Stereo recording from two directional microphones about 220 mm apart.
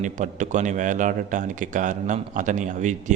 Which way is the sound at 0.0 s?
35° right (ahead or behind).